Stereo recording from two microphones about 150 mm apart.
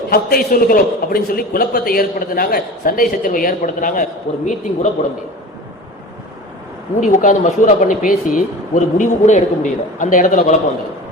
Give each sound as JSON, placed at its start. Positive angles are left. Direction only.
{"t": 0.1, "sound": "a man's voice", "side_deg": 85}
{"t": 7.0, "sound": "speech", "side_deg": 55}